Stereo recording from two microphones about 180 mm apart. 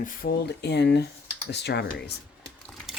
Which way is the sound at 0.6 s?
70° left (ahead or behind).